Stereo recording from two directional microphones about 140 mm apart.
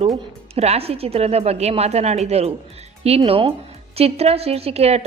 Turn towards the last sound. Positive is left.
turn(degrees=-50)  # may be behind; listen again after turning